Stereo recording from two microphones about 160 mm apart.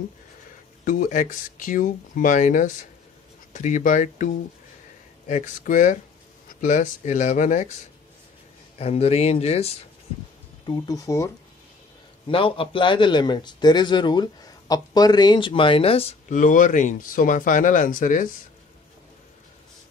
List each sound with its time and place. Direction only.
0.8 s speech: 55° left (ahead or behind)
8.7 s a man's voice: 40° left (ahead or behind)
10.6 s speech: 25° left (ahead or behind)
12.3 s a man's voice: 35° left (ahead or behind); by 18.3 s 55° left (ahead or behind)